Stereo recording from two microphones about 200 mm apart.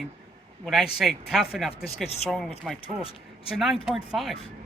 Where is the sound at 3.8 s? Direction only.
Centre (ahead or behind).